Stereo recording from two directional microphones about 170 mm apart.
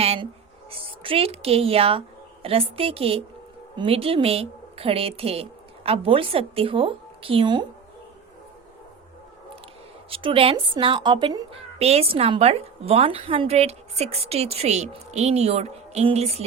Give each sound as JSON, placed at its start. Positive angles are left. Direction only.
{"t": 0.0, "sound": "a woman's voice", "side_deg": -35}
{"t": 10.1, "sound": "speech", "side_deg": -30}
{"t": 11.8, "sound": "a woman's voice", "side_deg": -35}